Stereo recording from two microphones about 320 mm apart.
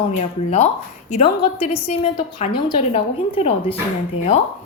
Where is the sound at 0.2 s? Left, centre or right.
Centre.